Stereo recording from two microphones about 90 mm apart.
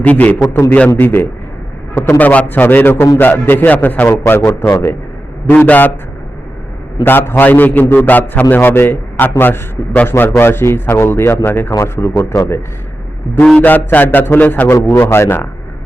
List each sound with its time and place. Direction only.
0.0 s a man's voice: 15° left (ahead or behind)
4.6 s a man's voice: 40° left (ahead or behind)
5.5 s a man's voice: 20° left (ahead or behind)
7.0 s a man's voice: 25° left (ahead or behind)
13.6 s a man's voice: 20° left (ahead or behind)